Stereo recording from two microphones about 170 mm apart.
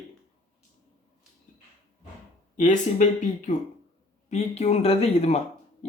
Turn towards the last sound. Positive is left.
turn(degrees=35)  # may be behind; listen again after turning